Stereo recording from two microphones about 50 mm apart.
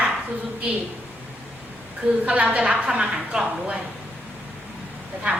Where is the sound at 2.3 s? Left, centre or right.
Right.